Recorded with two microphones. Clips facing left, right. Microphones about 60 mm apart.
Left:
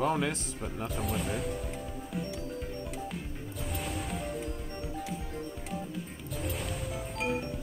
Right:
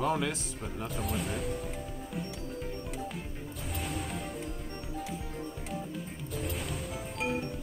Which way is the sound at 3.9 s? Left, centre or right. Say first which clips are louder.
Left 1 dB; centre.